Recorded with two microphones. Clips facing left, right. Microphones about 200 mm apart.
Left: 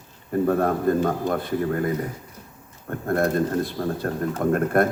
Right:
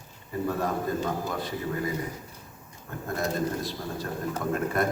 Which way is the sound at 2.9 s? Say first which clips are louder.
Left 8 dB; 55° left (ahead or behind).